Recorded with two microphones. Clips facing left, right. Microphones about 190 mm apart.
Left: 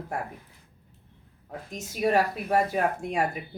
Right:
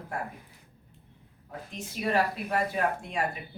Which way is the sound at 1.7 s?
40° left (ahead or behind).